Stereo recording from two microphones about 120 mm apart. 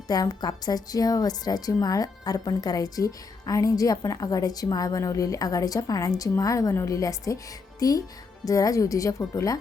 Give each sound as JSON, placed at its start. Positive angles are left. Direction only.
{"t": 0.1, "sound": "a woman's voice", "side_deg": 35}